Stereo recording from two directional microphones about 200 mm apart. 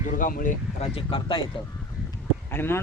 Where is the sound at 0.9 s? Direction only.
25° left (ahead or behind).